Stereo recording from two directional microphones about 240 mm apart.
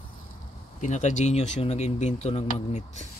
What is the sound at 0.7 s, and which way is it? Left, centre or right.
Speech, left.